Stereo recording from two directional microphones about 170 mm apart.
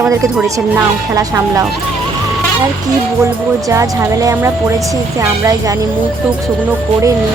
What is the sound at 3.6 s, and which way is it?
Speech, 20° right (ahead or behind).